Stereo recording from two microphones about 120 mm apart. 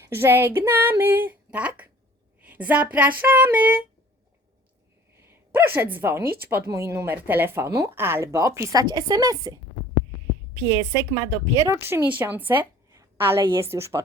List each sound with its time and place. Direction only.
0.0 s speech: 20° right (ahead or behind)
5.2 s a woman's voice: 20° right (ahead or behind)